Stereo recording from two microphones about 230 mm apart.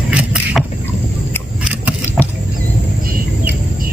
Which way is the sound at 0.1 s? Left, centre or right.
Centre.